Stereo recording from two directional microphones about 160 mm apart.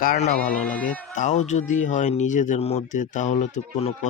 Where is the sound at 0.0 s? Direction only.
55° left (ahead or behind).